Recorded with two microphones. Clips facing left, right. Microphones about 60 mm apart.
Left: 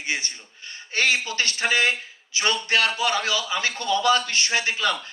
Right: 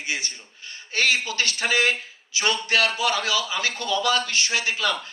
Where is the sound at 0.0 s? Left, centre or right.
Left.